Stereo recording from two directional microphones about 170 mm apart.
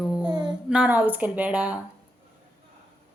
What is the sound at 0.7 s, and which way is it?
A woman's voice, 5° right (ahead or behind).